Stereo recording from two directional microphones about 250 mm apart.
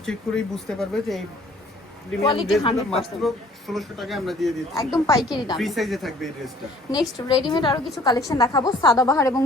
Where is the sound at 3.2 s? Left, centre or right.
Centre.